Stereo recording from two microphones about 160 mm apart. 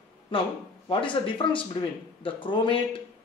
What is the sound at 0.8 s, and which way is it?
Speech, 30° left (ahead or behind).